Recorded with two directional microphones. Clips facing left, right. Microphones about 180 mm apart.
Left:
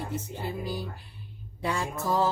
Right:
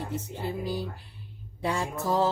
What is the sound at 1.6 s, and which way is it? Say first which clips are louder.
Speech: right 1 dB; 30° right (ahead or behind).